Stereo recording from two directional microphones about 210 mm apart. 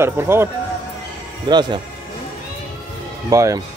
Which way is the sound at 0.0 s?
10° right (ahead or behind).